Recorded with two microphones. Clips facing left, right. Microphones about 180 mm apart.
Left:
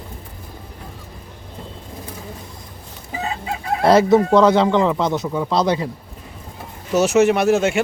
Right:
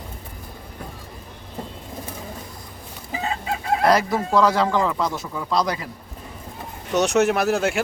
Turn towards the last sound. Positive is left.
turn(degrees=0)  # may be behind; listen again after turning